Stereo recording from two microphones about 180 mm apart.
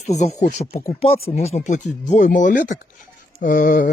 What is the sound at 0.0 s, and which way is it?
Speech, 40° left (ahead or behind).